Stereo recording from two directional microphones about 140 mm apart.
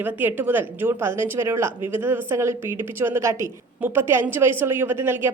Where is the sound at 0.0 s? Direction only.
15° right (ahead or behind).